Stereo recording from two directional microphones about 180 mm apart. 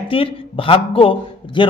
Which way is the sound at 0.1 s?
30° left (ahead or behind).